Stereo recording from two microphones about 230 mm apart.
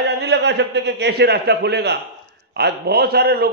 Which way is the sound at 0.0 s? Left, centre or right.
Right.